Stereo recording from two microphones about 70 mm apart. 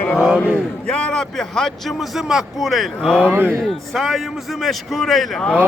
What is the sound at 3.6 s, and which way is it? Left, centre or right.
A man's voice, centre.